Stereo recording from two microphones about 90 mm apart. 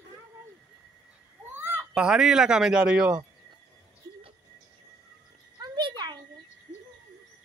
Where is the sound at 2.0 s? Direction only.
10° right (ahead or behind).